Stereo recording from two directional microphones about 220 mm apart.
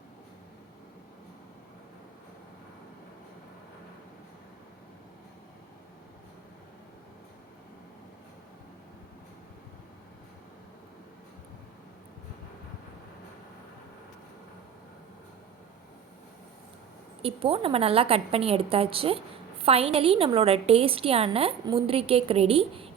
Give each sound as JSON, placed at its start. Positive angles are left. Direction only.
{"t": 17.2, "sound": "a woman's voice", "side_deg": -25}